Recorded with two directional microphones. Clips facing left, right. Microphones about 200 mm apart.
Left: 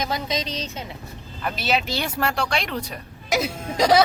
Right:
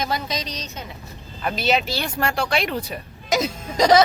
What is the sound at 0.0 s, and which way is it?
Speech, 20° left (ahead or behind).